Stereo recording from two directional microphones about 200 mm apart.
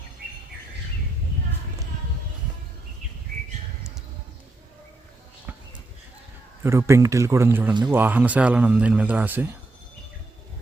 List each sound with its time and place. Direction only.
6.6 s a man's voice: 15° right (ahead or behind)
7.9 s a man's voice: 10° right (ahead or behind)